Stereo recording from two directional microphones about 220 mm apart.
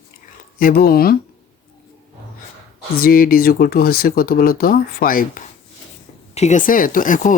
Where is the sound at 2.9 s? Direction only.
40° left (ahead or behind).